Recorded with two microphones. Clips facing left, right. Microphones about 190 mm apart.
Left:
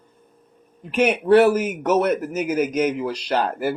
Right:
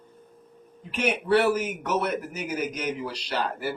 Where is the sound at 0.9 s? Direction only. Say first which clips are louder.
Left 7 dB; 50° left (ahead or behind).